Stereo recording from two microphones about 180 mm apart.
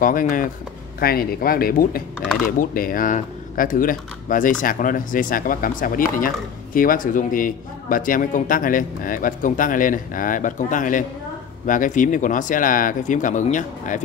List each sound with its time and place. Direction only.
0.0 s speech: 50° left (ahead or behind)